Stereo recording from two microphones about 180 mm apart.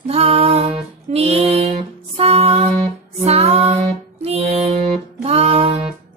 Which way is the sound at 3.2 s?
35° right (ahead or behind).